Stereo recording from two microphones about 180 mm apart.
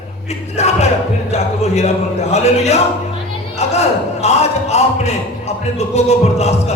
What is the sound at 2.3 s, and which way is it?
Speech, 35° left (ahead or behind).